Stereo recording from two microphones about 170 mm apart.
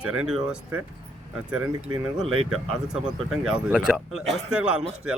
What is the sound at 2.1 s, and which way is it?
A man's voice, 5° right (ahead or behind).